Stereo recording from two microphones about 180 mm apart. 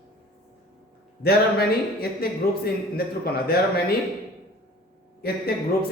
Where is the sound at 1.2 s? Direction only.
60° left (ahead or behind).